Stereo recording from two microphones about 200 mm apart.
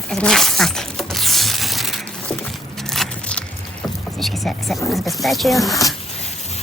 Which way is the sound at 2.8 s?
Centre (ahead or behind).